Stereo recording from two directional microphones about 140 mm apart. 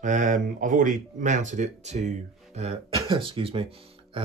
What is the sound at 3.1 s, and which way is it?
Speech, 40° right (ahead or behind).